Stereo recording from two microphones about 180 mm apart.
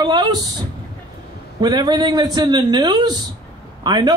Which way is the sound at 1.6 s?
25° right (ahead or behind).